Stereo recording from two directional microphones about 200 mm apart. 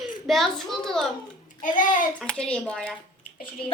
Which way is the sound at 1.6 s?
40° left (ahead or behind).